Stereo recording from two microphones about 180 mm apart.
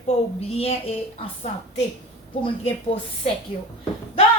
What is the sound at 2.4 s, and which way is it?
Speech, 30° left (ahead or behind).